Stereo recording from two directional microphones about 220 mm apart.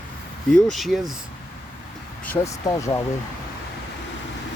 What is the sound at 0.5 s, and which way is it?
Speech, centre (ahead or behind).